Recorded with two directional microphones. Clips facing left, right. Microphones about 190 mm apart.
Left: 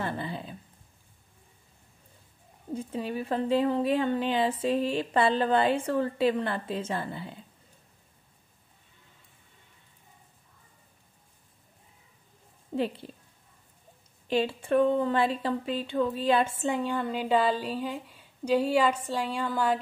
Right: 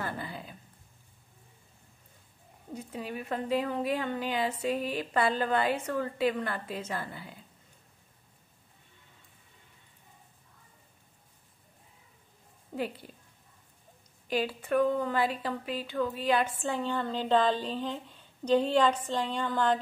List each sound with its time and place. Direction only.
0.0 s a sound: 25° left (ahead or behind)
2.7 s a woman's voice: 30° left (ahead or behind)
12.7 s a woman's voice: 25° left (ahead or behind)
14.2 s speech: 25° left (ahead or behind); by 19.8 s 5° left (ahead or behind)